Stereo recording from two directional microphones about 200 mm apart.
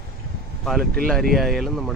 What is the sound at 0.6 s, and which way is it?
Speech, centre (ahead or behind).